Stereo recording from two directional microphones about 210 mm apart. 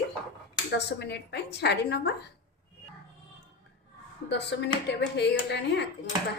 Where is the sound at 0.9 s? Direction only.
55° left (ahead or behind).